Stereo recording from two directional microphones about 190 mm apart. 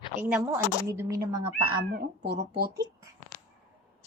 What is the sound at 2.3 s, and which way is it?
Speech, 55° right (ahead or behind).